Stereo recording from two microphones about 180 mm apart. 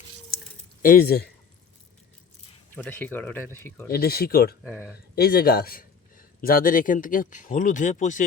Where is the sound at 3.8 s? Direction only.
60° left (ahead or behind).